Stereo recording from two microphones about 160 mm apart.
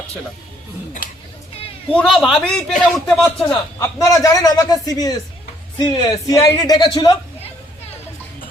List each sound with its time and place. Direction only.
1.9 s a man's voice: 5° left (ahead or behind)
3.8 s speech: 20° left (ahead or behind)